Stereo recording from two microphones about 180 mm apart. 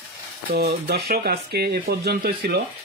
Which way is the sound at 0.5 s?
60° right (ahead or behind).